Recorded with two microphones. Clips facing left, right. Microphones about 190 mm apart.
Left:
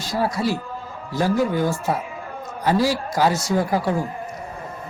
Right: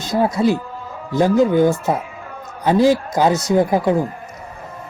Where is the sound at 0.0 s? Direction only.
20° right (ahead or behind).